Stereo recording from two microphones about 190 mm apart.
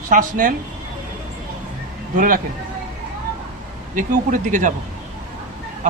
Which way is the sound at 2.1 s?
45° right (ahead or behind).